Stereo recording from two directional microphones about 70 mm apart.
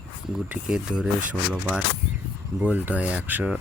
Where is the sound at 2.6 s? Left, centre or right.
Right.